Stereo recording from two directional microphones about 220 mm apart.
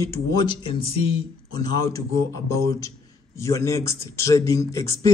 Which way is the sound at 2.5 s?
15° left (ahead or behind).